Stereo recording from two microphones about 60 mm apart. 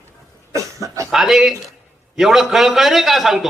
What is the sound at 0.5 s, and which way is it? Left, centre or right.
Cough, right.